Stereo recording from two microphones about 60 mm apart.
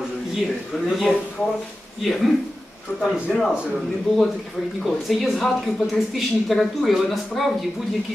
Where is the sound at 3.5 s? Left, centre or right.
Centre.